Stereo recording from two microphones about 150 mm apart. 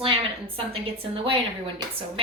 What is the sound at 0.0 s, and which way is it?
A woman's voice, 35° right (ahead or behind).